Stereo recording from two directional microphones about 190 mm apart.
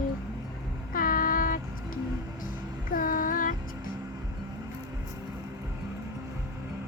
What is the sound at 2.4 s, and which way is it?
Music, 45° left (ahead or behind).